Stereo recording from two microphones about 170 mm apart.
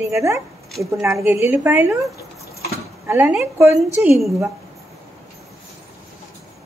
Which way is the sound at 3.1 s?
10° right (ahead or behind).